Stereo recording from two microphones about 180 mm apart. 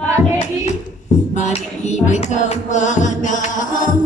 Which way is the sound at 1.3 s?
40° left (ahead or behind).